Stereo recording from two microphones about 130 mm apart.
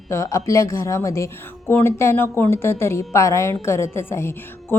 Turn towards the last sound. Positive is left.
turn(degrees=20)  # may be behind; listen again after turning